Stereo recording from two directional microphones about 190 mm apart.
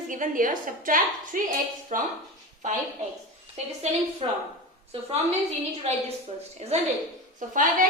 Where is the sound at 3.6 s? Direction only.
35° right (ahead or behind).